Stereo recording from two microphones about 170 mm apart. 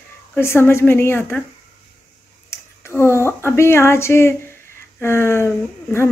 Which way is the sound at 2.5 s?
15° left (ahead or behind).